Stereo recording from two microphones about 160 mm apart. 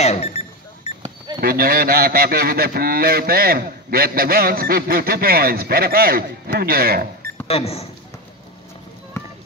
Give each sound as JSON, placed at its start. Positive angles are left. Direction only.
{"t": 0.0, "sound": "a sound", "side_deg": 40}
{"t": 1.4, "sound": "a man's voice", "side_deg": -70}
{"t": 7.4, "sound": "speech", "side_deg": 40}
{"t": 9.1, "sound": "music", "side_deg": 15}